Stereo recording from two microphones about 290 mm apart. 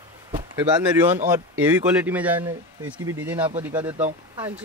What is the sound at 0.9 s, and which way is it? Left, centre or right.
Speech, centre.